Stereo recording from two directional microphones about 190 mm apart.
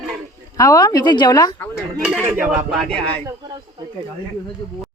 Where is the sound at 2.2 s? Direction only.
10° right (ahead or behind).